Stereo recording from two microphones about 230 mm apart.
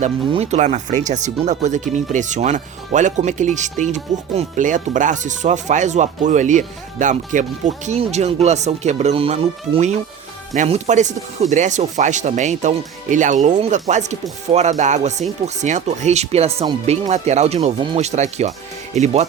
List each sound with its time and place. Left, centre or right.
0.0 s speech: right